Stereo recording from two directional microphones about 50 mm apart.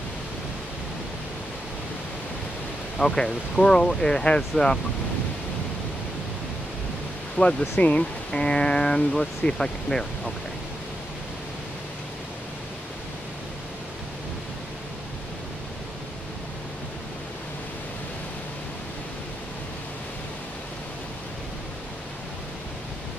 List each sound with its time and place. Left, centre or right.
3.0 s speech: centre
7.4 s speech: left; by 10.3 s centre